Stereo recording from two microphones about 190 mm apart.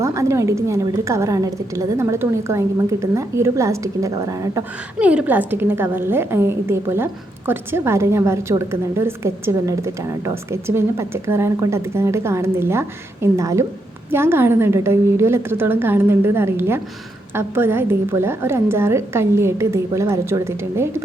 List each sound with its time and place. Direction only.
0.0 s a woman's voice: 15° right (ahead or behind)
4.9 s a woman's voice: 5° right (ahead or behind)